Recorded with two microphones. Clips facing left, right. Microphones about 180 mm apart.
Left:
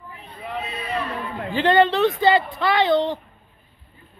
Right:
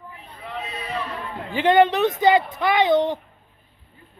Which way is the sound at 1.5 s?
20° right (ahead or behind).